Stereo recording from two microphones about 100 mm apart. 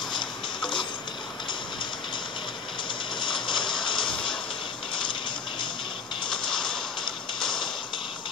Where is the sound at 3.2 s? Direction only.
55° left (ahead or behind).